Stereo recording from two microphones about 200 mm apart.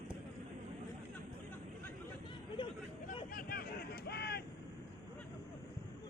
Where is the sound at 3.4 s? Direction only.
45° left (ahead or behind).